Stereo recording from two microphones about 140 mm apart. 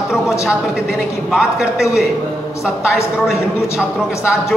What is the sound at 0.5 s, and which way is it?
A woman's voice, 5° right (ahead or behind).